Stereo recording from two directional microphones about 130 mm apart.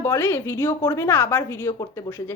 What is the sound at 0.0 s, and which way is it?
A woman's voice, 15° left (ahead or behind).